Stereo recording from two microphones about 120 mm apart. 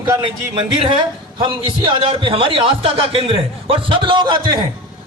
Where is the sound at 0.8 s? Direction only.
40° right (ahead or behind).